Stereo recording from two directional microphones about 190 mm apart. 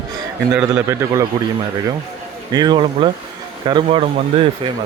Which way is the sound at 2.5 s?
20° right (ahead or behind).